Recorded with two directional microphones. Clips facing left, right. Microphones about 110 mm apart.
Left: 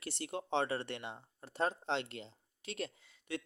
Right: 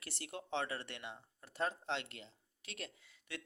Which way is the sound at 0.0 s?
25° left (ahead or behind).